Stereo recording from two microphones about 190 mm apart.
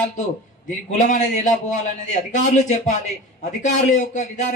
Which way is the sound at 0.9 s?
40° left (ahead or behind).